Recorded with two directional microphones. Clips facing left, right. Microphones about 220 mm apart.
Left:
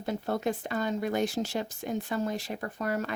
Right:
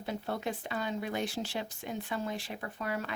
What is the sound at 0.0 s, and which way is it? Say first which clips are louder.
Speech: left 5 dB; 45° left (ahead or behind).